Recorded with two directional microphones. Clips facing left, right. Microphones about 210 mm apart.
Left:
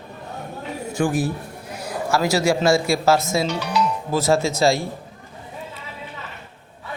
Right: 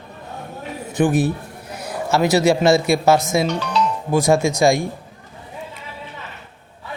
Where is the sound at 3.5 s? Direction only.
10° left (ahead or behind).